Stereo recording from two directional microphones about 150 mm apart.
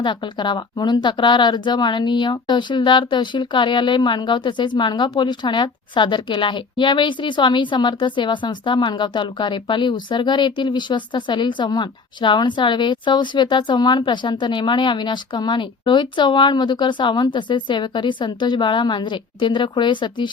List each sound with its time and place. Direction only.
0.0 s speech: 30° left (ahead or behind)